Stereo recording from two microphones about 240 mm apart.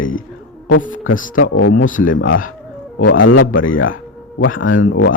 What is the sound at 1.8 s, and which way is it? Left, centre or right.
Speech, left.